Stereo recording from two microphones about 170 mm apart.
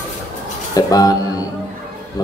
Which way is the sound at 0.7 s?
20° left (ahead or behind).